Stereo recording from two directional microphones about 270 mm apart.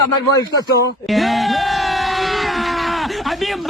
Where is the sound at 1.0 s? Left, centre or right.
Centre.